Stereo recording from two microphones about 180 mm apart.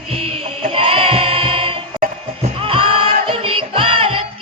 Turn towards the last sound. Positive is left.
turn(degrees=-30)  # may be behind; listen again after turning